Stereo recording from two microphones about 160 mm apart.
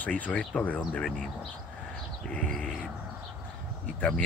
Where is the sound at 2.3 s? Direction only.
5° left (ahead or behind).